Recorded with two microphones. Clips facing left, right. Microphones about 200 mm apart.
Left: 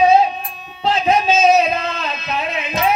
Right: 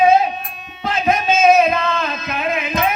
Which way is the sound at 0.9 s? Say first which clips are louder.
Left 1 dB; 55° right (ahead or behind).